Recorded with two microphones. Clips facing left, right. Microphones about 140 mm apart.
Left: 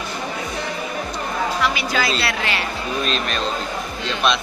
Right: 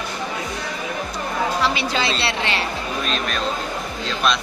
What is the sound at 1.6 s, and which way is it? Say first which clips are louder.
A woman's voice: even; 30° right (ahead or behind).